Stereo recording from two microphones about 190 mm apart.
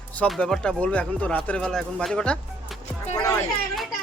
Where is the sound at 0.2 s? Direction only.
5° left (ahead or behind).